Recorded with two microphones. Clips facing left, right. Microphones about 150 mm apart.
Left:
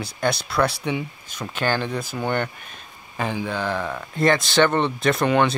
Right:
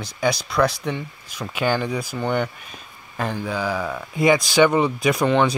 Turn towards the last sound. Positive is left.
turn(degrees=0)  # may be behind; listen again after turning